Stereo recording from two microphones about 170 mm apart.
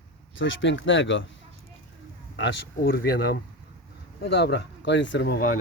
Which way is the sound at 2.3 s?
90° left.